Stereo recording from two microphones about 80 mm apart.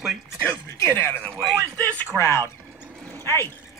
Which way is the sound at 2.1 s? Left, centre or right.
Left.